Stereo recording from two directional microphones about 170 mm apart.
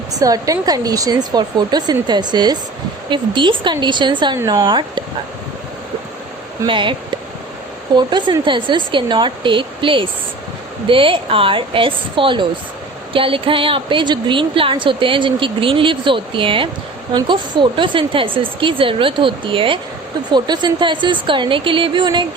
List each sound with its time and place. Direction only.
0.1 s speech: 20° right (ahead or behind)
6.7 s speech: 30° right (ahead or behind)
7.9 s a woman's voice: 25° right (ahead or behind)